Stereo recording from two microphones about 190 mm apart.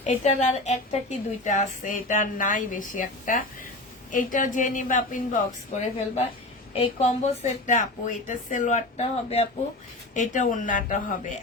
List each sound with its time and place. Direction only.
0.0 s a woman's voice: 40° left (ahead or behind)